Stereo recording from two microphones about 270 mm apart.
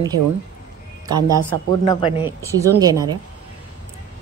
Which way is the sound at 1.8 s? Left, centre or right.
Centre.